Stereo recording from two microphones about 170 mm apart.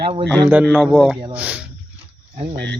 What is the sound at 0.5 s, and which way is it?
Speech, centre (ahead or behind).